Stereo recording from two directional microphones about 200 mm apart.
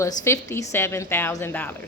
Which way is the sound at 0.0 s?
15° left (ahead or behind).